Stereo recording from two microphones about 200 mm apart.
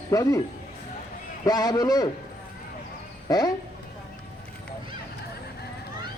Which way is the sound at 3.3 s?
20° left (ahead or behind).